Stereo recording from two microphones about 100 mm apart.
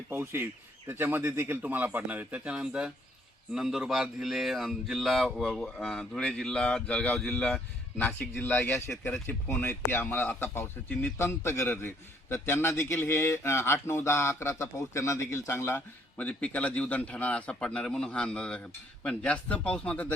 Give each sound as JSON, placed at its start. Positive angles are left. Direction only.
{"t": 0.1, "sound": "a man's voice", "side_deg": -25}